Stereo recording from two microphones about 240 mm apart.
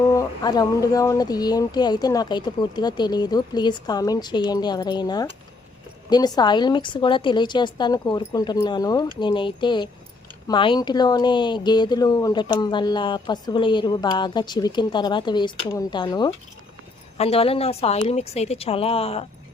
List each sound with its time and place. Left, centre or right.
0.1 s speech: centre